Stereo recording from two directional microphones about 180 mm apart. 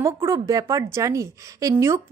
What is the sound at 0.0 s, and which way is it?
A woman's voice, 15° right (ahead or behind).